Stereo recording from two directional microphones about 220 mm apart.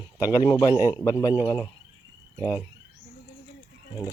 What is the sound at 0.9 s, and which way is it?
Speech, 15° left (ahead or behind).